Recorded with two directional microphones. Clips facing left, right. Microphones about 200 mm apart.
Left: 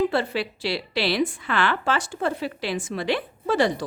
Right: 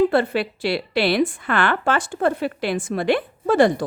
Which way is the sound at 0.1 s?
55° right (ahead or behind).